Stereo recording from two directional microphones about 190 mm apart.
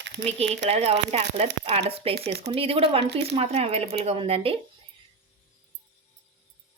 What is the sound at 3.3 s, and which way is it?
Speech, 35° right (ahead or behind).